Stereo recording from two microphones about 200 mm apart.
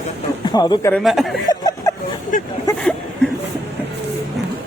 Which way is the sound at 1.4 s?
20° left (ahead or behind).